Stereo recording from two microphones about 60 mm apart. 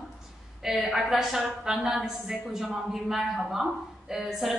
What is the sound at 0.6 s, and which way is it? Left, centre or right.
A woman's voice, centre.